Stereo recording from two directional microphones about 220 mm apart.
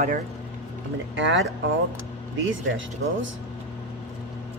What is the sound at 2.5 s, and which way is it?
Speech, 60° right (ahead or behind).